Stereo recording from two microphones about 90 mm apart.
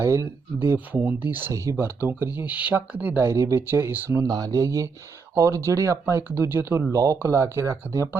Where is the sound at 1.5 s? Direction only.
35° right (ahead or behind).